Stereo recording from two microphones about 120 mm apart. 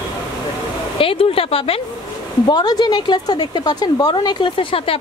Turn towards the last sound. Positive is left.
turn(degrees=50)  # may be behind; listen again after turning